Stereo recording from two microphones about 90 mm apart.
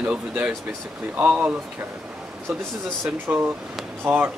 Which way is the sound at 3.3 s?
15° right (ahead or behind).